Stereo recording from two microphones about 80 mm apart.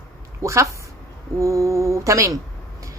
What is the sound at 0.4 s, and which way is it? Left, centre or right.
Speech, right.